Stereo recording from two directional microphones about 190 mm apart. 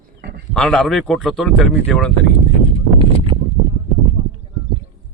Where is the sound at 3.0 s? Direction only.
25° right (ahead or behind).